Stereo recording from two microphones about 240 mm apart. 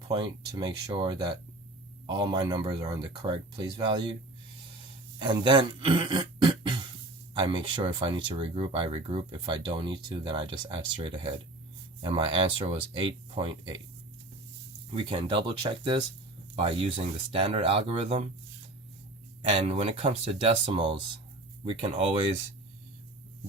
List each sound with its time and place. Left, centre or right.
0.1 s speech: centre
5.2 s speech: centre
14.9 s speech: right
19.4 s speech: right